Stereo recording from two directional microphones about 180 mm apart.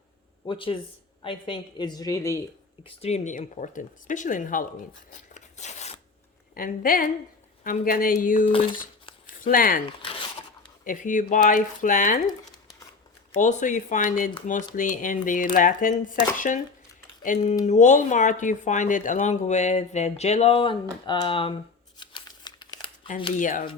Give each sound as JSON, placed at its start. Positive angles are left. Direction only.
{"t": 0.4, "sound": "a woman's voice", "side_deg": 30}
{"t": 2.8, "sound": "speech", "side_deg": 35}
{"t": 5.3, "sound": "a sound", "side_deg": 40}
{"t": 6.5, "sound": "speech", "side_deg": 50}
{"t": 10.0, "sound": "zipper", "side_deg": 30}
{"t": 10.8, "sound": "speech", "side_deg": 45}
{"t": 13.4, "sound": "speech", "side_deg": 45}
{"t": 23.3, "sound": "speech", "side_deg": 45}